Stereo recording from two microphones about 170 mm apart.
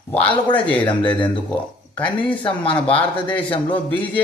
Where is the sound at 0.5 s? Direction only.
10° left (ahead or behind).